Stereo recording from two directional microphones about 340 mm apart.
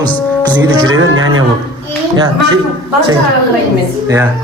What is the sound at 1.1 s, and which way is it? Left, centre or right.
Speech, right.